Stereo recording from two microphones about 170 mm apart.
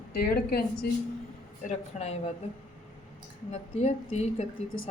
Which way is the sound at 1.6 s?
40° left (ahead or behind).